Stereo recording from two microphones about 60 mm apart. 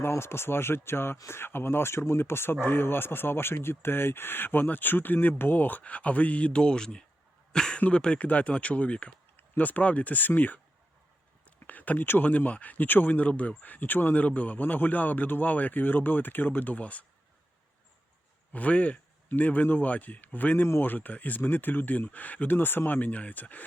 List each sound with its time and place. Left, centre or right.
0.1 s speech: left; by 7.0 s centre
7.5 s cough: centre
7.8 s a man's voice: left
18.5 s a man's voice: left